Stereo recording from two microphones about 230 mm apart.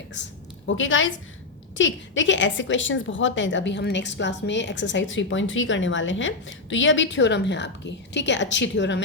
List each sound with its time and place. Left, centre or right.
0.2 s a woman's voice: left